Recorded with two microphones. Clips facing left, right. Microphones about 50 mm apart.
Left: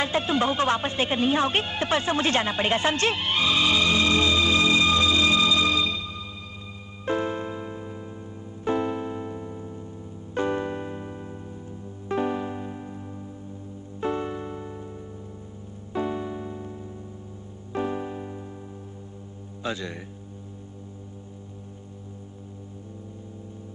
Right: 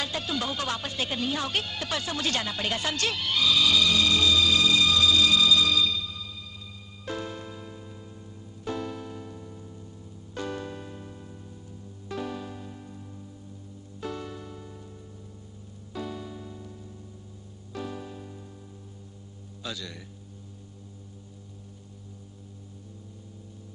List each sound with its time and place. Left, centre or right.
0.0 s speech: left
7.1 s music: left
14.0 s music: left
15.9 s music: left
17.7 s music: left
19.6 s a man's voice: left